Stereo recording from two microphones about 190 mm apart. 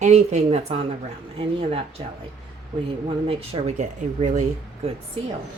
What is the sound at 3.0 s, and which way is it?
Speech, 30° right (ahead or behind).